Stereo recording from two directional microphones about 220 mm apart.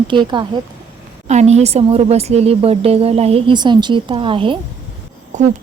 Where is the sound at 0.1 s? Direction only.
20° right (ahead or behind).